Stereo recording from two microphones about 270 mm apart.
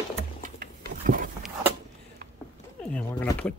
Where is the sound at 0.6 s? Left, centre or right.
Right.